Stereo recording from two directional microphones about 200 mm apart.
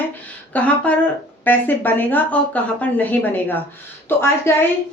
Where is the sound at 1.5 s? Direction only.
10° left (ahead or behind).